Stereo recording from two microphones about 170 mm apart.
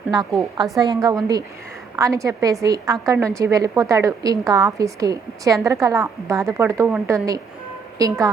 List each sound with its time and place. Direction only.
0.6 s a woman's voice: centre (ahead or behind)
0.9 s a woman's voice: 20° right (ahead or behind)